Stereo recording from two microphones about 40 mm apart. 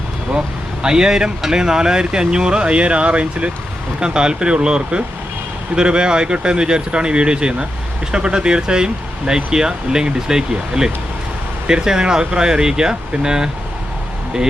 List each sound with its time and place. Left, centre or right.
0.3 s speech: centre